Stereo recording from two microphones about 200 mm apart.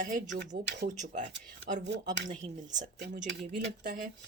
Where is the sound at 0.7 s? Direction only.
55° right (ahead or behind).